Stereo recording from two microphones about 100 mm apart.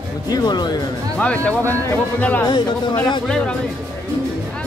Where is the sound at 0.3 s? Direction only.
45° left (ahead or behind).